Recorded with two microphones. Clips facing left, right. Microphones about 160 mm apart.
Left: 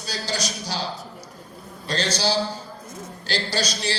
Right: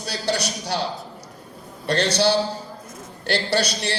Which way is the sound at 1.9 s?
65° right (ahead or behind).